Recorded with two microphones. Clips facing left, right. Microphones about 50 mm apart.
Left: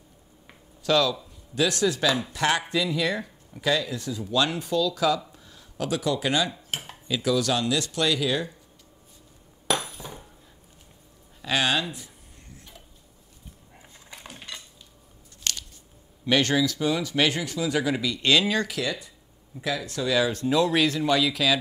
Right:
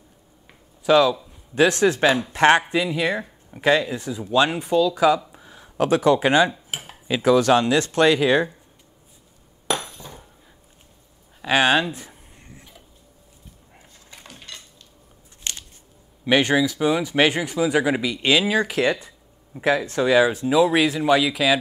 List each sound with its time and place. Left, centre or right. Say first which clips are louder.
0.8 s speech: right 6 dB; right
1.5 s speech: right 6 dB; right
2.7 s speech: right 3 dB; right
5.3 s a sound: right 5 dB; right
5.8 s speech: right 9 dB; right
6.5 s dishes: right 1 dB; centre
7.1 s speech: right 8 dB; right
9.7 s hammer: right 1 dB; centre
11.4 s speech: right 7 dB; right
14.1 s dishes: left 1 dB; centre
15.5 s a sound: left 1 dB; right
16.3 s speech: right 4 dB; centre
18.7 s speech: right 8 dB; right
20.3 s speech: right 4 dB; centre